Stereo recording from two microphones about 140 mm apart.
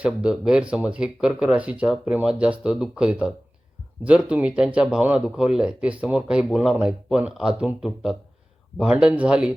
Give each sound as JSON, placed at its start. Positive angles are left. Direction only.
{"t": 0.0, "sound": "speech", "side_deg": -5}